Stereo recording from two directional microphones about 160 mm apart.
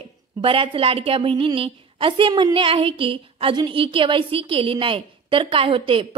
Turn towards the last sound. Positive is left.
turn(degrees=-35)  # may be behind; listen again after turning